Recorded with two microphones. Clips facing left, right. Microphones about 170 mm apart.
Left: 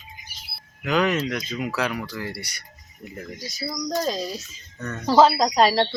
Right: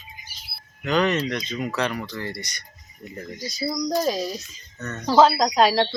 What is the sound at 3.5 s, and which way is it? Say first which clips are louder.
Speech: right 4 dB; 20° right (ahead or behind).